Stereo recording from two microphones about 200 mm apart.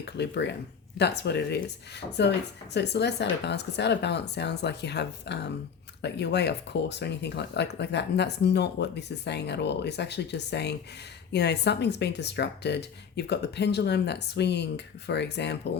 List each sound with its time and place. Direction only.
0.0 s speech: 60° left (ahead or behind)